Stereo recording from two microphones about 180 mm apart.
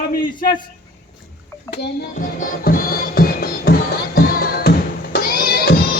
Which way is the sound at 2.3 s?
50° left (ahead or behind).